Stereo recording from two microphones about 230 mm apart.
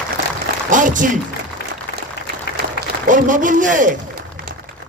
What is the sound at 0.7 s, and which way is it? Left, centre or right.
Speech, right.